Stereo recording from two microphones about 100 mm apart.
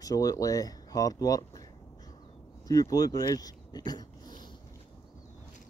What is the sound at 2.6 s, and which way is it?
Speech, 40° left (ahead or behind).